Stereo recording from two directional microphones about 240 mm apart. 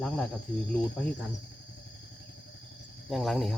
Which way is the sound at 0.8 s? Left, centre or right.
Left.